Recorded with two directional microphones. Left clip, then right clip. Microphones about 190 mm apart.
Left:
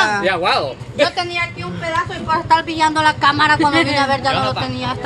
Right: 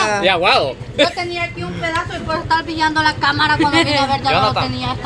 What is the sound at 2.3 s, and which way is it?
Speech, 30° left (ahead or behind).